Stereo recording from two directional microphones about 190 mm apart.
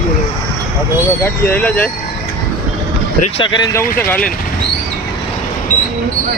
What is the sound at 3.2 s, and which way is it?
Speech, 25° left (ahead or behind).